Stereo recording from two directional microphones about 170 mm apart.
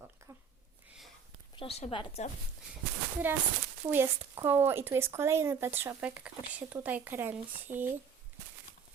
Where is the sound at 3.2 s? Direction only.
10° right (ahead or behind).